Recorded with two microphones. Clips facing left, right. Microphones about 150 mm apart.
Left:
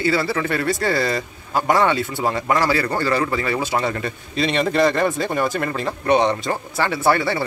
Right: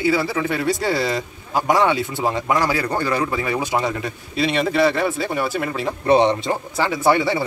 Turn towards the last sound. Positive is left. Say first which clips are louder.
# right 1 dB
turn(degrees=-15)  # may be behind; listen again after turning